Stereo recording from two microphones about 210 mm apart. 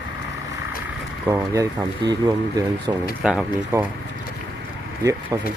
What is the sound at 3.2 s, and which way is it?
Speech, 5° right (ahead or behind).